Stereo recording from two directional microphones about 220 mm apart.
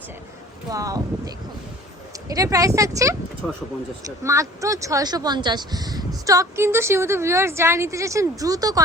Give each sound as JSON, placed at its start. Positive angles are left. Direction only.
{"t": 0.7, "sound": "a woman's voice", "side_deg": -15}
{"t": 4.2, "sound": "a woman's voice", "side_deg": -15}